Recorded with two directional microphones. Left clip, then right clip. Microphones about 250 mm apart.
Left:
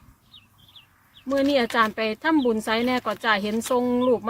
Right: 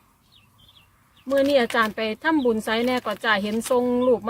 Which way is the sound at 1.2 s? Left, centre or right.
Centre.